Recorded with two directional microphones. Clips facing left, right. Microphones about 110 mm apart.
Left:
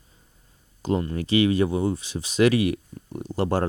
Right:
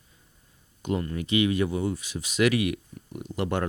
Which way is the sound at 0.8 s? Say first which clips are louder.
Left 4 dB; 30° left (ahead or behind).